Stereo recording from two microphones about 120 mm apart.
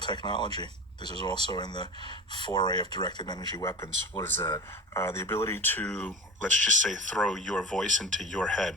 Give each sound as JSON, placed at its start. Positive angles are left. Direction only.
{"t": 0.0, "sound": "speech", "side_deg": 40}
{"t": 6.5, "sound": "speech", "side_deg": -90}
{"t": 7.2, "sound": "speech", "side_deg": 5}